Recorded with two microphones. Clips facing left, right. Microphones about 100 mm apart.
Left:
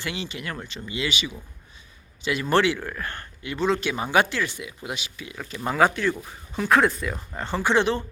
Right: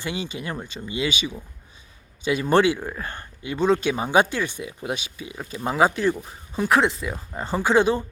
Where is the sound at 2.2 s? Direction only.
20° right (ahead or behind).